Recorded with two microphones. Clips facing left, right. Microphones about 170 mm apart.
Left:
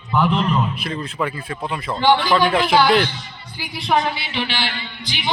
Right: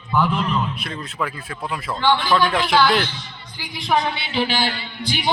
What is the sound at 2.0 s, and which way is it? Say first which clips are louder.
Speech: left 3 dB; 15° left (ahead or behind).